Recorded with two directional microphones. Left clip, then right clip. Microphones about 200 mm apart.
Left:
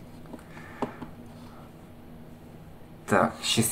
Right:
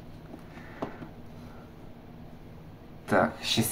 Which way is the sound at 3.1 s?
10° left (ahead or behind).